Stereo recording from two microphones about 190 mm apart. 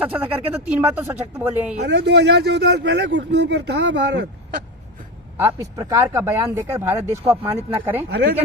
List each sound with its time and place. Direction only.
0.0 s speech: 10° right (ahead or behind)
1.8 s speech: 65° right (ahead or behind)
5.4 s speech: 15° right (ahead or behind)